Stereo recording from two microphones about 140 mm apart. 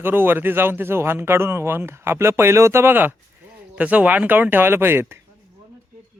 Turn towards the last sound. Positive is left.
turn(degrees=-15)  # may be behind; listen again after turning